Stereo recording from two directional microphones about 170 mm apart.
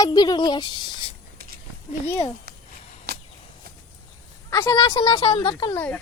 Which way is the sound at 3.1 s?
65° right (ahead or behind).